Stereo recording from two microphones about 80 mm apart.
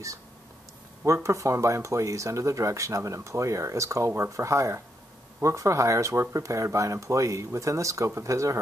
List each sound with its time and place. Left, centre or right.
1.0 s speech: right